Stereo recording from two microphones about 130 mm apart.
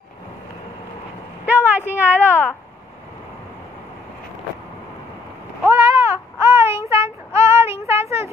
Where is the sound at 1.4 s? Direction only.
15° right (ahead or behind).